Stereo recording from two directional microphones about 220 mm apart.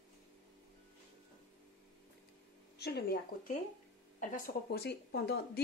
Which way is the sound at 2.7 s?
50° left (ahead or behind).